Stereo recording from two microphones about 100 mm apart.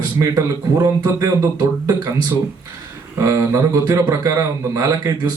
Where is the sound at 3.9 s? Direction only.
25° right (ahead or behind).